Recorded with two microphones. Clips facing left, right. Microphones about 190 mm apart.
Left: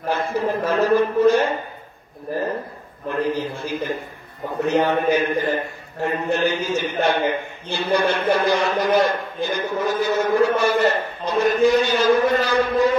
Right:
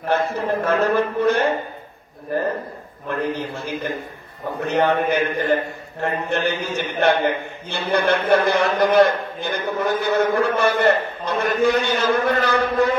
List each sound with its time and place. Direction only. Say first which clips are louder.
0.1 s a man's voice: right 1 dB; 60° right (ahead or behind)
3.1 s a man's voice: left 2 dB; 60° right (ahead or behind)